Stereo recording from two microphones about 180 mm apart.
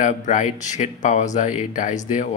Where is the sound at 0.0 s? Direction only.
45° left (ahead or behind).